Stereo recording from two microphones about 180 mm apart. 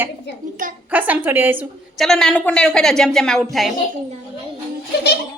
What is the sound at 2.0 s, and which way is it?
A woman's voice, 5° left (ahead or behind).